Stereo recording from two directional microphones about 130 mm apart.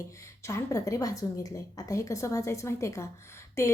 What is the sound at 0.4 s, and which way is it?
A woman's voice, 25° left (ahead or behind).